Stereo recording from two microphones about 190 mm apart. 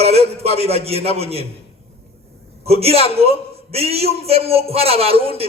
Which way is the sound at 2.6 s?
30° right (ahead or behind).